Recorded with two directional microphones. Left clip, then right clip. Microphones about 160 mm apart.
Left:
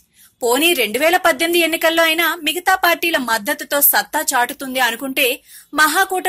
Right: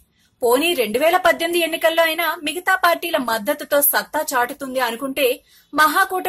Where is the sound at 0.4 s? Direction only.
10° left (ahead or behind).